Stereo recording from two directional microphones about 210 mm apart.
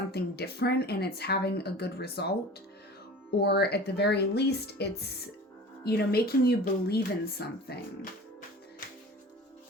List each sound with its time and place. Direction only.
0.1 s speech: 50° left (ahead or behind)
3.4 s speech: 50° left (ahead or behind)